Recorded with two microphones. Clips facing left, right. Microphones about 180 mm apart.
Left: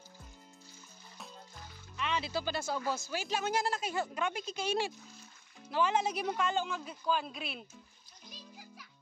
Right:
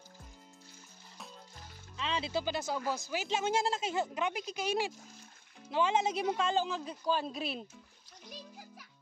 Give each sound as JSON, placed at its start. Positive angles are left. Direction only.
{"t": 2.0, "sound": "speech", "side_deg": -25}
{"t": 8.3, "sound": "music", "side_deg": -55}